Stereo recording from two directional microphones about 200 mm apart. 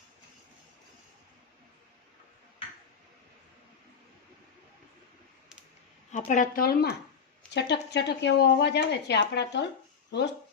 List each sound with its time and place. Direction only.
6.1 s speech: 40° left (ahead or behind); by 9.6 s 60° left (ahead or behind)